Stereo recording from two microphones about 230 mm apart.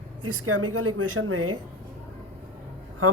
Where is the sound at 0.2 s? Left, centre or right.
Right.